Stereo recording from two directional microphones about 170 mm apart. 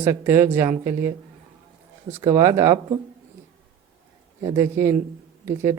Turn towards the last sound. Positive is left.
turn(degrees=-15)  # may be behind; listen again after turning